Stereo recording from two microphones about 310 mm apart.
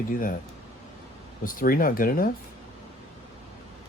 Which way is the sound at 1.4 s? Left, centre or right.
Left.